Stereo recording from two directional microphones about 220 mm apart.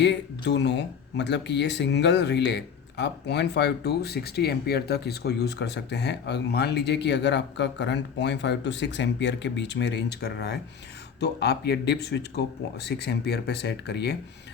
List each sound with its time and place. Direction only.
0.0 s speech: 50° left (ahead or behind)